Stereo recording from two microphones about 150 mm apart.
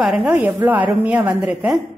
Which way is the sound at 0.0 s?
5° right (ahead or behind).